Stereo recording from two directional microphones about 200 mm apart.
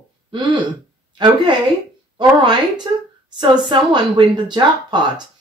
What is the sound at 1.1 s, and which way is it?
A woman's voice, 20° right (ahead or behind).